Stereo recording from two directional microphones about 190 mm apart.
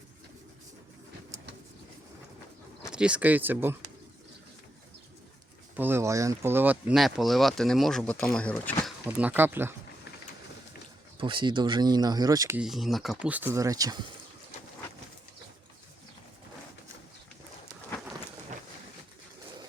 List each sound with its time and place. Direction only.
2.9 s speech: 5° right (ahead or behind)
5.7 s speech: 10° right (ahead or behind); by 8.7 s 5° left (ahead or behind)
9.0 s speech: 10° right (ahead or behind)
11.2 s speech: 25° right (ahead or behind)
12.5 s speech: centre (ahead or behind); by 14.0 s 20° right (ahead or behind)